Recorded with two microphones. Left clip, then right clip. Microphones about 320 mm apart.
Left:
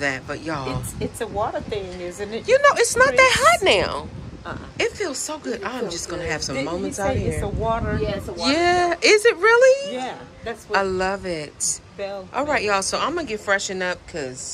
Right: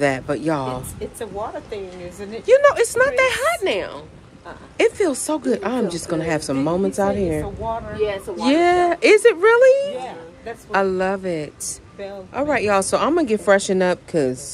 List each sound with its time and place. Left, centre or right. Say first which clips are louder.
0.0 s speech: right 5 dB; centre
1.2 s speech: left 4 dB; left
2.4 s speech: right 2 dB; centre
4.7 s speech: right 6 dB; centre
9.9 s a sound: left 1 dB; left
10.7 s speech: right 2 dB; centre